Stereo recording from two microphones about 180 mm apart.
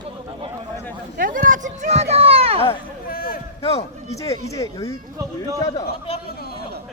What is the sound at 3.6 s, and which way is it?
Speech, 35° left (ahead or behind).